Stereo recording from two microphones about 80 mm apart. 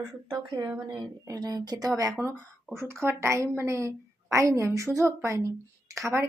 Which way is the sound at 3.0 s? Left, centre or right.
Right.